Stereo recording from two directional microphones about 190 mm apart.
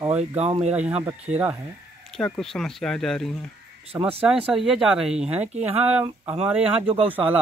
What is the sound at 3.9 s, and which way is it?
Speech, 15° right (ahead or behind).